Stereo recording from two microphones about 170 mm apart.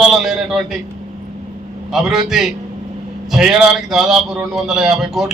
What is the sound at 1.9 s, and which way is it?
Speech, centre (ahead or behind).